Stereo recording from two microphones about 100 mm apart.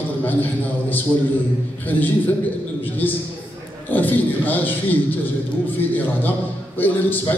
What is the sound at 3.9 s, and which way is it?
Speech, 15° left (ahead or behind).